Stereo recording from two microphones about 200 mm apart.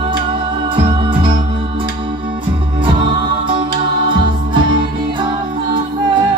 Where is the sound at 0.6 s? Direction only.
25° right (ahead or behind).